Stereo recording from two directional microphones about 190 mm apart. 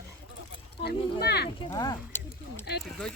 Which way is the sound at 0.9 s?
60° left (ahead or behind).